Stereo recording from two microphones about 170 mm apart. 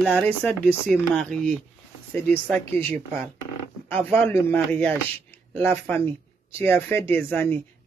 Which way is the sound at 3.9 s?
10° left (ahead or behind).